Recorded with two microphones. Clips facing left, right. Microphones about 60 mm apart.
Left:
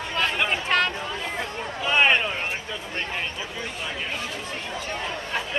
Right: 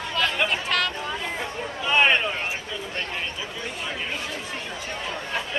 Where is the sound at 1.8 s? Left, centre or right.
Centre.